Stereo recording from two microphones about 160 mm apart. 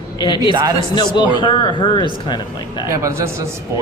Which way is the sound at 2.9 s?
15° right (ahead or behind).